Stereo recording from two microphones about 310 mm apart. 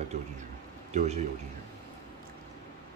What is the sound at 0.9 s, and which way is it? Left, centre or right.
Speech, right.